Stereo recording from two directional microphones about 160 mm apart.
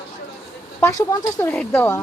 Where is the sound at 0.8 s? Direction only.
15° left (ahead or behind).